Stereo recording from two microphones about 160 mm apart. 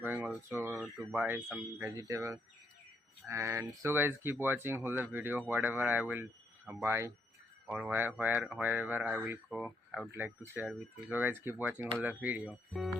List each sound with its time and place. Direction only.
0.0 s speech: 10° right (ahead or behind)